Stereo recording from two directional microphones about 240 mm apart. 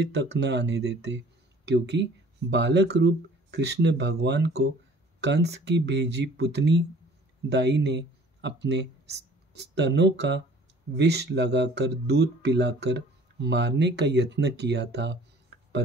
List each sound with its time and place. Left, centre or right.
0.0 s speech: right